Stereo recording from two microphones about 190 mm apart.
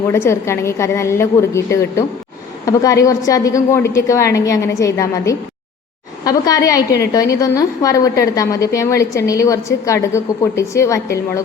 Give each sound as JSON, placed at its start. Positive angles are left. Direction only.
{"t": 0.1, "sound": "a woman's voice", "side_deg": 15}